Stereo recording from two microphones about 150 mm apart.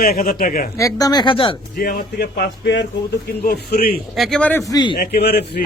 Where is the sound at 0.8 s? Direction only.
25° left (ahead or behind).